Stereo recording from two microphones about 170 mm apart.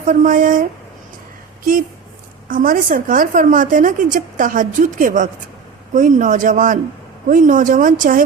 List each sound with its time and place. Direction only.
0.0 s a woman's voice: 50° right (ahead or behind)
2.5 s a woman's voice: 55° right (ahead or behind)